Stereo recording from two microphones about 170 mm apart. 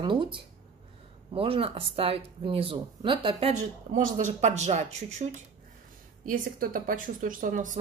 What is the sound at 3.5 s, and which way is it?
Speech, 45° right (ahead or behind).